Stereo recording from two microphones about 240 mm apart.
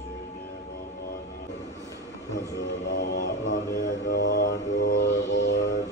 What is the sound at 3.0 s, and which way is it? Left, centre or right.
Mantra, left.